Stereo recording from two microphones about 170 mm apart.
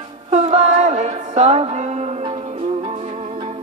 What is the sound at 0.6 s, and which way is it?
Music, 40° right (ahead or behind).